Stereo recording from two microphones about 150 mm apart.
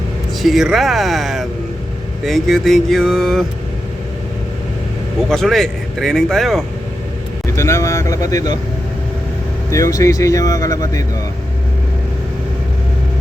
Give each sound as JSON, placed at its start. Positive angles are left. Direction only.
{"t": 0.4, "sound": "speech", "side_deg": 0}
{"t": 5.3, "sound": "speech", "side_deg": 0}
{"t": 7.5, "sound": "speech", "side_deg": 20}
{"t": 9.6, "sound": "speech", "side_deg": 20}